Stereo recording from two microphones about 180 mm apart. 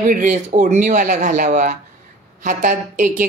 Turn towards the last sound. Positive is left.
turn(degrees=-45)  # may be behind; listen again after turning